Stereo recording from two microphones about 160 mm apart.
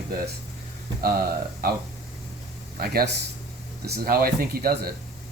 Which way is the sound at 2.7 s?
70° right (ahead or behind).